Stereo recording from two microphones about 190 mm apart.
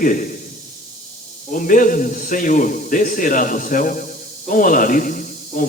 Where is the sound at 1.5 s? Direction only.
45° left (ahead or behind).